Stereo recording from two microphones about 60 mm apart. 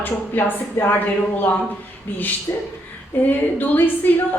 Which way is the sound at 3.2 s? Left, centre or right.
Left.